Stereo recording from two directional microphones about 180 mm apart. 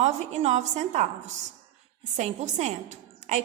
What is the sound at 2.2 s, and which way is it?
A woman's voice, 40° right (ahead or behind).